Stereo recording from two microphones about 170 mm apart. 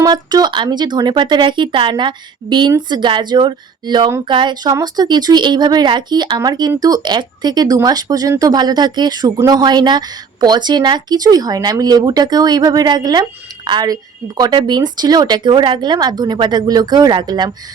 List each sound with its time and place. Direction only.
0.0 s speech: 25° right (ahead or behind)